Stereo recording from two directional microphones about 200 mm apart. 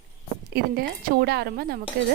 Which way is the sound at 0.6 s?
50° right (ahead or behind).